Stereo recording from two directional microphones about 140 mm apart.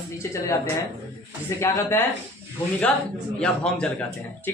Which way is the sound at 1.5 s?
20° left (ahead or behind).